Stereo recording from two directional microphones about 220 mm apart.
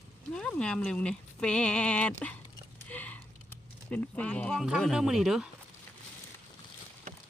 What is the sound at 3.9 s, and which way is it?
Speech, 5° left (ahead or behind).